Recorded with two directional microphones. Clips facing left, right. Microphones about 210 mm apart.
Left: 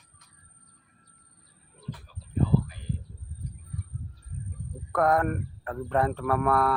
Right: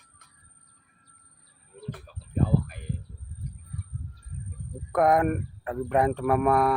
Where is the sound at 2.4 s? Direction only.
55° right (ahead or behind).